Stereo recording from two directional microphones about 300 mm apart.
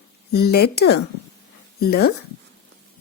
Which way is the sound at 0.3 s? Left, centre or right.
Left.